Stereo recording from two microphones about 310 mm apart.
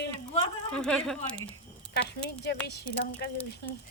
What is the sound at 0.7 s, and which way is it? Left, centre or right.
Speech, centre.